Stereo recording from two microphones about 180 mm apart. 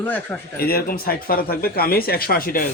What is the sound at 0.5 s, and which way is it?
Speech, 55° left (ahead or behind).